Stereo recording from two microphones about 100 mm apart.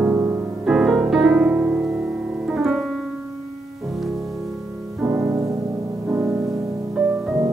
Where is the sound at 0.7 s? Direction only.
5° right (ahead or behind).